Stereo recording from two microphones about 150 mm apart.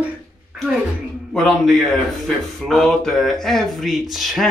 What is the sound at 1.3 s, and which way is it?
A man's voice, 5° left (ahead or behind).